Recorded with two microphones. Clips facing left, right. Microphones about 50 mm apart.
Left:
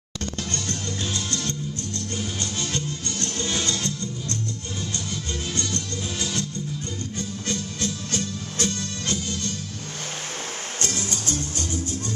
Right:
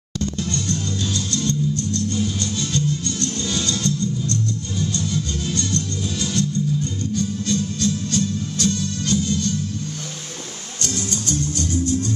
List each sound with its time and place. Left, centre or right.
0.2 s music: left
10.8 s music: left